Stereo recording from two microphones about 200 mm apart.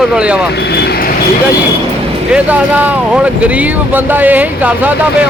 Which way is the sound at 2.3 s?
5° right (ahead or behind).